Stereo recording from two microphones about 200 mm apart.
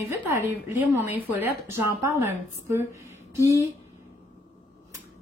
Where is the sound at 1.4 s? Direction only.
15° right (ahead or behind).